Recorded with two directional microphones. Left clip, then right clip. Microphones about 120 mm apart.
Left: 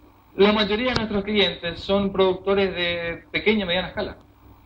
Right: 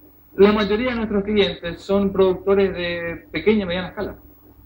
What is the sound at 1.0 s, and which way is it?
A man's voice, 5° left (ahead or behind).